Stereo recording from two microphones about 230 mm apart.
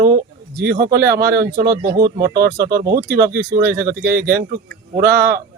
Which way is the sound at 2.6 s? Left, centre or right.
Centre.